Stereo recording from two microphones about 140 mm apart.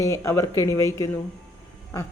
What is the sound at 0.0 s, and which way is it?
Speech, 20° left (ahead or behind).